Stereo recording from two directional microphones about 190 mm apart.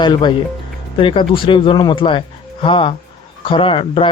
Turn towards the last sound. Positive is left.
turn(degrees=25)  # may be behind; listen again after turning